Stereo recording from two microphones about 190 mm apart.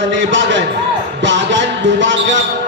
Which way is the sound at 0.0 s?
75° right (ahead or behind).